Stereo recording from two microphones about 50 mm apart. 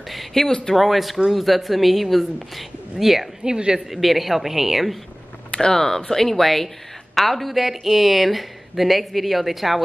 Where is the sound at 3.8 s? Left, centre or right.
Centre.